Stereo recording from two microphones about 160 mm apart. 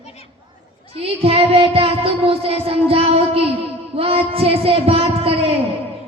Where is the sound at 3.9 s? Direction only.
35° right (ahead or behind).